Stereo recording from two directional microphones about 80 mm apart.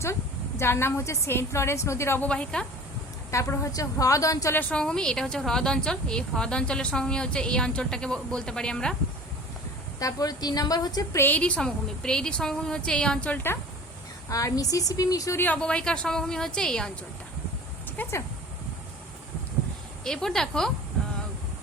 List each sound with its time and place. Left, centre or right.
0.6 s a woman's voice: left
2.2 s a woman's voice: centre
3.3 s a woman's voice: left
4.7 s a woman's voice: centre
10.0 s a woman's voice: left
11.3 s a woman's voice: centre
14.3 s a woman's voice: left
15.5 s a woman's voice: centre
17.9 s a sound: left
20.1 s a woman's voice: centre